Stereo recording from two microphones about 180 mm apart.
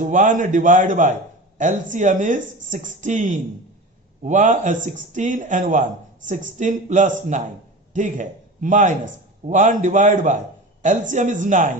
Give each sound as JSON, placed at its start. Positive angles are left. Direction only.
{"t": 0.0, "sound": "speech", "side_deg": -45}